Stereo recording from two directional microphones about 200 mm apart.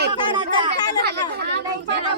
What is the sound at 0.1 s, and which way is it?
Chatter, 25° right (ahead or behind).